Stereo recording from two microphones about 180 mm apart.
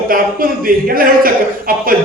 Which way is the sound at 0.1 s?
50° right (ahead or behind).